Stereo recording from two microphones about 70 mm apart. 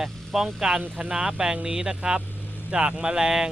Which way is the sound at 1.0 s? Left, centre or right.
Centre.